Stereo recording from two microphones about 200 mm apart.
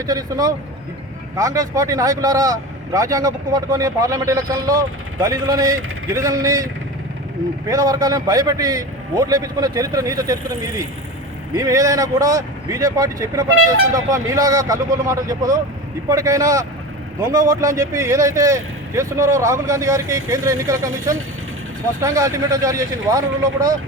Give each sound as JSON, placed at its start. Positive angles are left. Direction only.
{"t": 0.0, "sound": "speech", "side_deg": -20}
{"t": 7.7, "sound": "speech", "side_deg": -20}
{"t": 11.5, "sound": "speech", "side_deg": -15}